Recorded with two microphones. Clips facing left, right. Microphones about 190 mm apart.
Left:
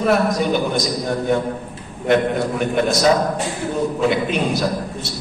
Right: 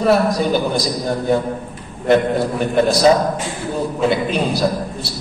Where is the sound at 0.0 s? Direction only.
35° right (ahead or behind).